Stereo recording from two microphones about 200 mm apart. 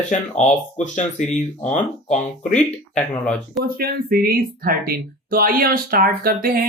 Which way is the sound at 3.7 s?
45° right (ahead or behind).